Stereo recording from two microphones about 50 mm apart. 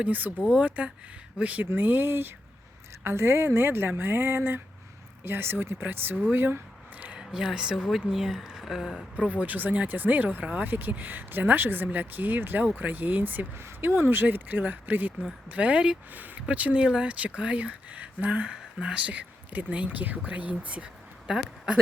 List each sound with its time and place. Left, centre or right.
0.0 s speech: right
7.0 s a sound: centre
7.3 s speech: centre
9.1 s speech: right
16.1 s speech: right